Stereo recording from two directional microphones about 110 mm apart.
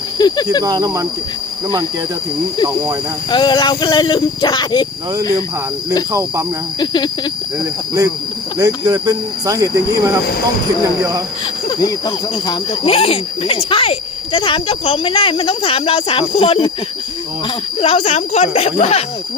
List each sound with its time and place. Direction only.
0.2 s speech: 40° left (ahead or behind)
0.6 s speech: 35° right (ahead or behind)
3.2 s speech: 40° left (ahead or behind)
6.7 s speech: 40° left (ahead or behind)
8.5 s speech: 35° right (ahead or behind)
11.8 s speech: 40° left (ahead or behind)
12.8 s speech: 60° left (ahead or behind)
17.7 s speech: 75° left (ahead or behind)